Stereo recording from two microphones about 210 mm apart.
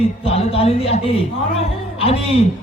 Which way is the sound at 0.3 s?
30° left (ahead or behind).